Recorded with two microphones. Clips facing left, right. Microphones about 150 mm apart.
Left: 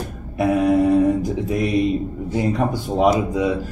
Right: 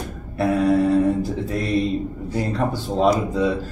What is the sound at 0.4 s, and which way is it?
Mantra, 15° left (ahead or behind).